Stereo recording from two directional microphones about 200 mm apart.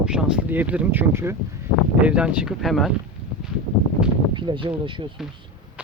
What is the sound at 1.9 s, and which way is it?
Speech, 5° right (ahead or behind).